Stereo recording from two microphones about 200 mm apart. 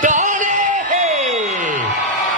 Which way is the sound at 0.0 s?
40° right (ahead or behind).